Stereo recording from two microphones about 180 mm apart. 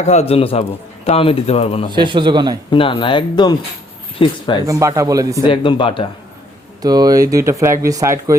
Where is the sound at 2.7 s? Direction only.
25° left (ahead or behind).